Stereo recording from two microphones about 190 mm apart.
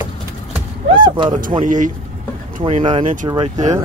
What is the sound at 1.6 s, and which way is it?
Speech, 40° right (ahead or behind).